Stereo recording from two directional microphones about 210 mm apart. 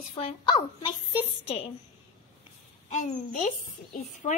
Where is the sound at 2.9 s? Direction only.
35° left (ahead or behind).